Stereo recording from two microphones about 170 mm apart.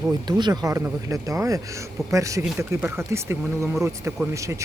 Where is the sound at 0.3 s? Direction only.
25° right (ahead or behind).